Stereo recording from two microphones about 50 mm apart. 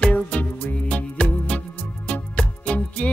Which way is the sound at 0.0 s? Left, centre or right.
Left.